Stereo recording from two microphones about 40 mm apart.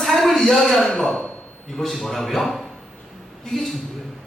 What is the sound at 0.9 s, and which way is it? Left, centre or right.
Speech, centre.